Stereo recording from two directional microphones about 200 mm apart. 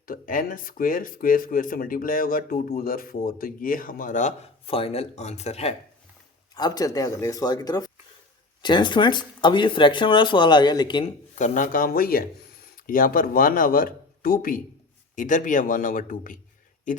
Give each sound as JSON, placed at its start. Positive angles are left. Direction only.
{"t": 0.0, "sound": "speech", "side_deg": 45}
{"t": 6.5, "sound": "speech", "side_deg": 20}
{"t": 11.3, "sound": "a man's voice", "side_deg": 40}